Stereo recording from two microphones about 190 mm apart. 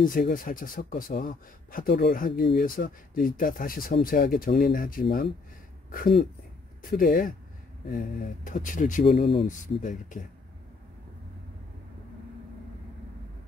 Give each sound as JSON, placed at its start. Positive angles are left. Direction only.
{"t": 0.0, "sound": "speech", "side_deg": 45}
{"t": 5.9, "sound": "speech", "side_deg": 45}
{"t": 9.0, "sound": "speech", "side_deg": 30}
{"t": 9.5, "sound": "speech", "side_deg": 40}